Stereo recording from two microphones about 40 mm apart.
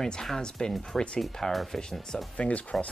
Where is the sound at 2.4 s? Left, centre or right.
Left.